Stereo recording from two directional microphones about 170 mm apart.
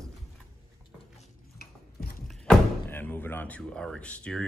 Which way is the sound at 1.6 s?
60° left (ahead or behind).